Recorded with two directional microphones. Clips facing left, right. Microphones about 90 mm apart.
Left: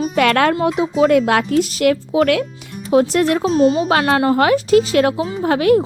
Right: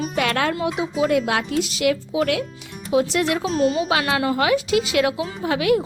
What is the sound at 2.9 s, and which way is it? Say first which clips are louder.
Speech: left 5 dB; 45° left (ahead or behind).